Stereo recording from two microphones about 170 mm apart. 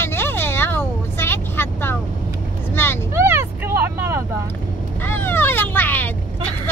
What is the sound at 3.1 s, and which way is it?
Vehicle, 15° right (ahead or behind).